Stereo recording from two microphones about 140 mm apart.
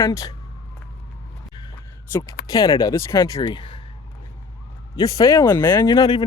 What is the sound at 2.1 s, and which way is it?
Speech, 20° left (ahead or behind).